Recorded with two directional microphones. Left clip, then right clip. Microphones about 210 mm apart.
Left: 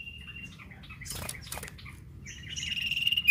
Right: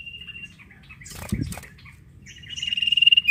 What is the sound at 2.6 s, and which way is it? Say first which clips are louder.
Frog: right 10 dB; centre (ahead or behind).